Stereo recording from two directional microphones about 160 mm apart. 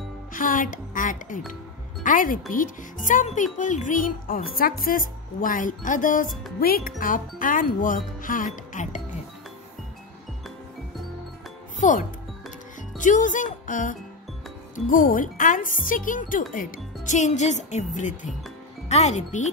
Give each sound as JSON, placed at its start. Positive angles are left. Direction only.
{"t": 0.3, "sound": "speech", "side_deg": 55}
{"t": 6.6, "sound": "speech", "side_deg": 65}
{"t": 11.8, "sound": "speech", "side_deg": 50}
{"t": 12.9, "sound": "music", "side_deg": 55}
{"t": 14.9, "sound": "speech", "side_deg": 60}